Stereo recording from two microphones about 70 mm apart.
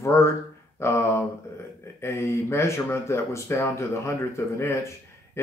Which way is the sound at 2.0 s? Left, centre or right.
Left.